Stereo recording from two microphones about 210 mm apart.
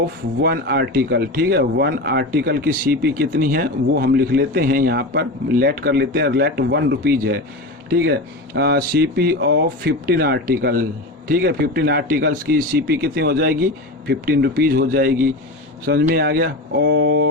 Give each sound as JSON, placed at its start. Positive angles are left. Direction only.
{"t": 0.4, "sound": "speech", "side_deg": -50}
{"t": 8.5, "sound": "speech", "side_deg": -50}